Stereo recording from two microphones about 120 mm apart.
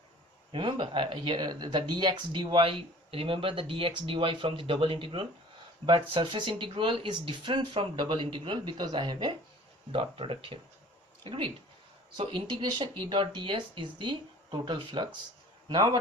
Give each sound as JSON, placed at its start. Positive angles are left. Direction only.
{"t": 0.5, "sound": "a man's voice", "side_deg": -45}